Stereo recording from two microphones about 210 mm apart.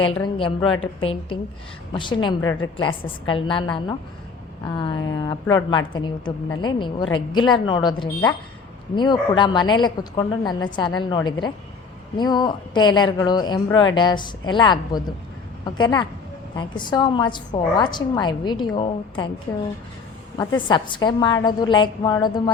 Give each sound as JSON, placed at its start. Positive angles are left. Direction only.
{"t": 0.0, "sound": "a woman's voice", "side_deg": 25}
{"t": 9.0, "sound": "a woman's voice", "side_deg": 20}
{"t": 20.4, "sound": "a woman's voice", "side_deg": 20}